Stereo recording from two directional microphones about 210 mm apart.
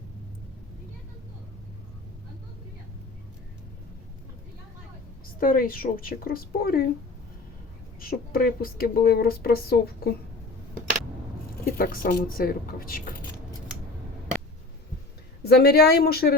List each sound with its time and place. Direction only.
5.4 s speech: 45° left (ahead or behind)
7.9 s speech: 45° left (ahead or behind)
11.6 s a woman's voice: 45° left (ahead or behind)
15.4 s speech: 50° left (ahead or behind)